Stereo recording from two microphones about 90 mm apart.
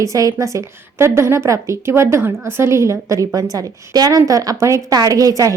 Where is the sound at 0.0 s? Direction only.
40° right (ahead or behind).